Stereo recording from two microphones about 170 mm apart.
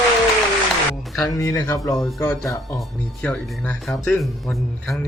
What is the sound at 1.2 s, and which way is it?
Speech, 20° left (ahead or behind).